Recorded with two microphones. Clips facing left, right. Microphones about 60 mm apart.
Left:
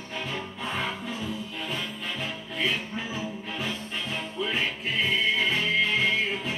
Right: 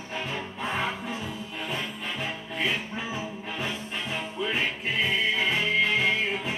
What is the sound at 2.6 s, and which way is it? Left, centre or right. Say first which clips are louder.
Music: even; right.